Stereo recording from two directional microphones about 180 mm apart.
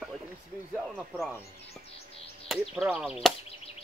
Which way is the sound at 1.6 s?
35° left (ahead or behind).